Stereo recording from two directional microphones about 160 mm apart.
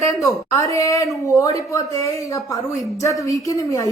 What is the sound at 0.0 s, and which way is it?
A woman's voice, 20° left (ahead or behind).